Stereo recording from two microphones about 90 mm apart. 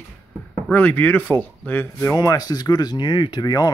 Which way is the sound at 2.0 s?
35° left (ahead or behind).